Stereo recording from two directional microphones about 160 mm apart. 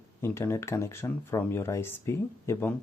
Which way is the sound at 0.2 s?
15° left (ahead or behind).